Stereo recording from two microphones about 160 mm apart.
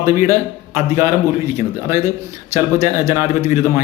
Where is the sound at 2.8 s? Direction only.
15° right (ahead or behind).